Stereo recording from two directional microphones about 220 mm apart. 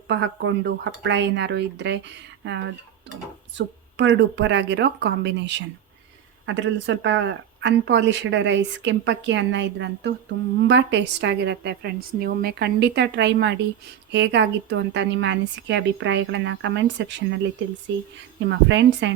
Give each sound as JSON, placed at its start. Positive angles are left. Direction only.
{"t": 0.1, "sound": "a woman's voice", "side_deg": -55}
{"t": 3.9, "sound": "a woman's voice", "side_deg": -55}